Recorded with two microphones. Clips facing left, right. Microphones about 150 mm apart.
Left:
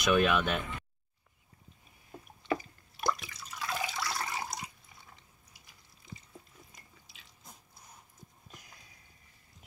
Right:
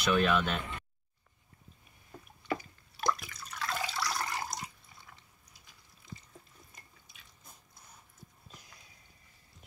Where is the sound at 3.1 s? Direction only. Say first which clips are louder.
Right 1 dB; centre (ahead or behind).